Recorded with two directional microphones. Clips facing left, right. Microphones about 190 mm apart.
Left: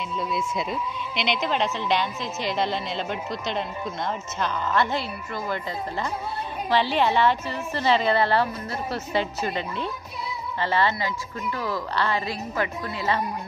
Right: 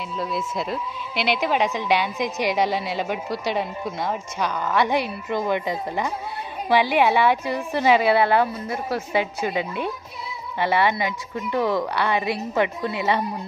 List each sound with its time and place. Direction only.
0.2 s speech: centre (ahead or behind); by 13.2 s 20° right (ahead or behind)